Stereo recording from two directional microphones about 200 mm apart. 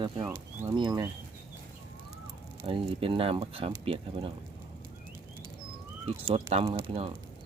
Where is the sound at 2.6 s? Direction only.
25° right (ahead or behind).